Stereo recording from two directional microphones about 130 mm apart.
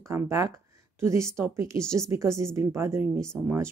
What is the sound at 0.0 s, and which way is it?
A woman's voice, 20° right (ahead or behind).